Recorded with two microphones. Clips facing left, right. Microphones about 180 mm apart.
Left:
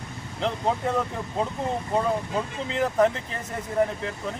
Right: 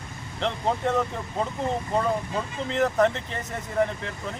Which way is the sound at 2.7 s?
5° left (ahead or behind).